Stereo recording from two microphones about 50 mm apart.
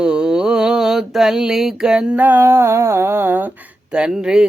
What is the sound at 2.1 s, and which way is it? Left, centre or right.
Mantra, right.